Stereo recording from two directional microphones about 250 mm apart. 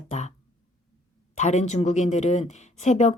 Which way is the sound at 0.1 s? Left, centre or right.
Left.